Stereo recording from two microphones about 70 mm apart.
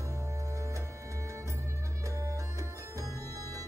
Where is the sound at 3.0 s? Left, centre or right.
Right.